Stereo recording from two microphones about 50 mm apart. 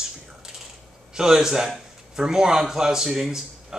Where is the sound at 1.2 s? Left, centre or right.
Centre.